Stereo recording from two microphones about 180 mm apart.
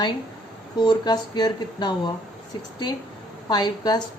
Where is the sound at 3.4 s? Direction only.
20° left (ahead or behind).